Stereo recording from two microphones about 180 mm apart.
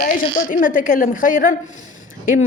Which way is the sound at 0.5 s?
50° left (ahead or behind).